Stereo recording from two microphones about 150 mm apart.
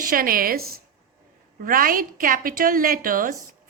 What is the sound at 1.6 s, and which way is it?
A woman's voice, 70° right (ahead or behind).